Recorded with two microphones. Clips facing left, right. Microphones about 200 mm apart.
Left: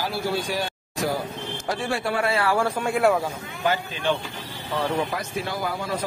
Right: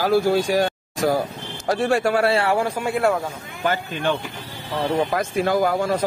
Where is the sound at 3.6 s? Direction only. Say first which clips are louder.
Right 2 dB; 50° right (ahead or behind).